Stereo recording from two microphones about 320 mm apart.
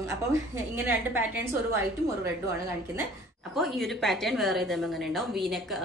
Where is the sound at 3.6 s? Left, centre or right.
Centre.